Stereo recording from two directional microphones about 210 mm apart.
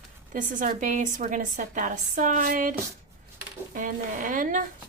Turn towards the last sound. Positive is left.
turn(degrees=-40)  # may be behind; listen again after turning